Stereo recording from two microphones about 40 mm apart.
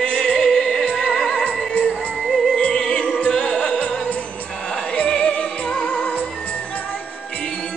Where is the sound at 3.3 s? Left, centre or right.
Left.